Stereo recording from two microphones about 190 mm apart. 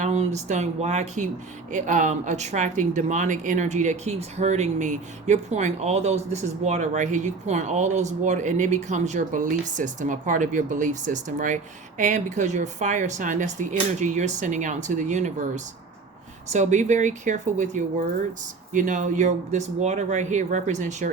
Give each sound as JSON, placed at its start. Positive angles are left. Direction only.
{"t": 0.0, "sound": "speech", "side_deg": -35}